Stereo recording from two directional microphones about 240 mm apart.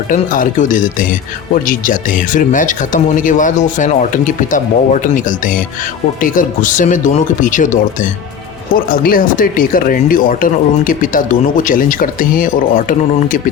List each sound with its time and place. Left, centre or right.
0.1 s speech: left